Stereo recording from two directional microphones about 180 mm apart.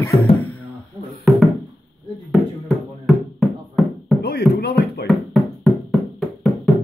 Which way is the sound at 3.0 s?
Centre (ahead or behind).